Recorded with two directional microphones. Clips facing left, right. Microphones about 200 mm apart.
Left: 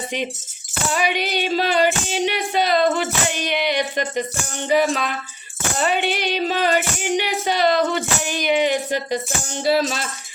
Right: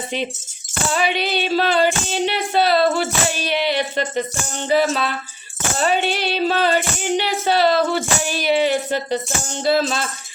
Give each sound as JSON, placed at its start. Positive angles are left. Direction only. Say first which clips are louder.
{"t": 0.9, "sound": "female singing", "louder": "right 1 dB", "side_deg": 15}
{"t": 6.1, "sound": "female singing", "louder": "right 2 dB", "side_deg": 15}